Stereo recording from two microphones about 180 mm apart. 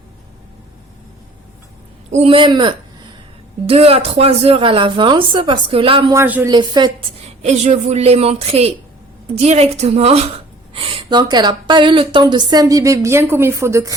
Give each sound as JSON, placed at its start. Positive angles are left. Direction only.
{"t": 2.1, "sound": "a woman's voice", "side_deg": -30}
{"t": 6.1, "sound": "speech", "side_deg": -10}
{"t": 6.5, "sound": "a woman's voice", "side_deg": -25}
{"t": 7.4, "sound": "a woman's voice", "side_deg": -40}